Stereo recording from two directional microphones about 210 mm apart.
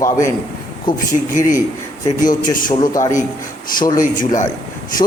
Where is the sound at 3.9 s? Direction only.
40° left (ahead or behind).